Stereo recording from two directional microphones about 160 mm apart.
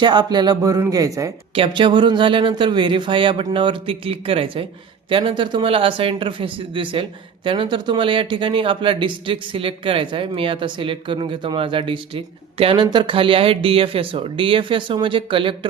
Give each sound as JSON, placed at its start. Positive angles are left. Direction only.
{"t": 0.0, "sound": "speech", "side_deg": -25}
{"t": 1.5, "sound": "speech", "side_deg": -35}